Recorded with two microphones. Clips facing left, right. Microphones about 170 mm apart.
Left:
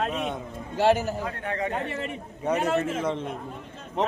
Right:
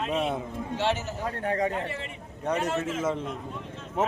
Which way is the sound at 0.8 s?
55° left (ahead or behind).